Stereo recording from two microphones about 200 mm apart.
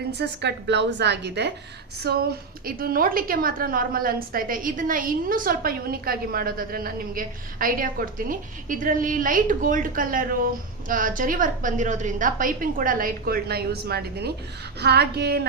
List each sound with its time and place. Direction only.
0.1 s a woman's voice: 55° right (ahead or behind)